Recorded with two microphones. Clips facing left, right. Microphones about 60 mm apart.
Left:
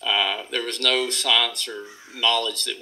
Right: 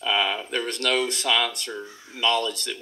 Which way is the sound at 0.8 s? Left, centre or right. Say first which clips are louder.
Left 1 dB; right.